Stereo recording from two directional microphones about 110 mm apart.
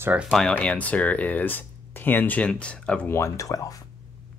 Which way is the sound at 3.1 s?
25° left (ahead or behind).